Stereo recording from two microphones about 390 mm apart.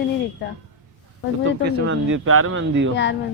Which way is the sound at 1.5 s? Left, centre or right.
Right.